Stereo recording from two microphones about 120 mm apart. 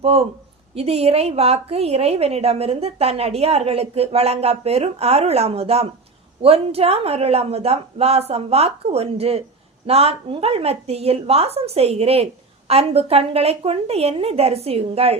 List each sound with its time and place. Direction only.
0.0 s speech: 55° right (ahead or behind)